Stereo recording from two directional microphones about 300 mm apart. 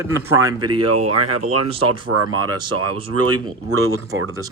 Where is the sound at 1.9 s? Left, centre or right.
Right.